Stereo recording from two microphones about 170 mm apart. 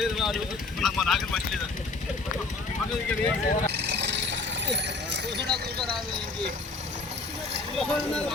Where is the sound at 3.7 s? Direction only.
85° right.